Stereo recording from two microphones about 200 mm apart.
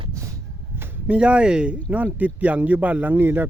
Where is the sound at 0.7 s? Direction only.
10° right (ahead or behind).